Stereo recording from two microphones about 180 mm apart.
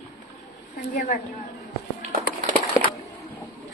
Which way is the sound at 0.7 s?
50° left (ahead or behind).